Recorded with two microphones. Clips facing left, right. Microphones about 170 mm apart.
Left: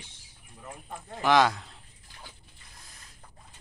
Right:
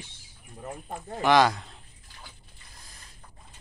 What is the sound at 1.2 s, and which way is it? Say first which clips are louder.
Speech: right 2 dB; centre (ahead or behind).